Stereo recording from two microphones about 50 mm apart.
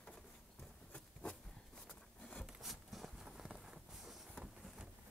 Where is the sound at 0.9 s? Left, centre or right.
Left.